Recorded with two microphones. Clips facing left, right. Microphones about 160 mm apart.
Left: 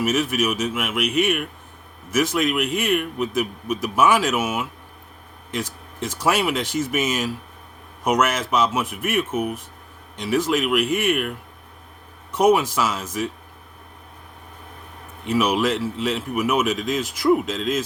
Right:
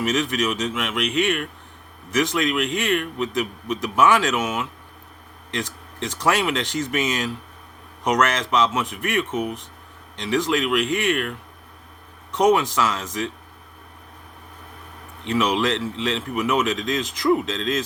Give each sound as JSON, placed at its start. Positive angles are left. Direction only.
{"t": 0.0, "sound": "a man's voice", "side_deg": 5}
{"t": 15.2, "sound": "speech", "side_deg": 5}